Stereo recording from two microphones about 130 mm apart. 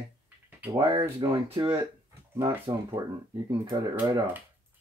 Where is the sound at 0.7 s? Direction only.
45° right (ahead or behind).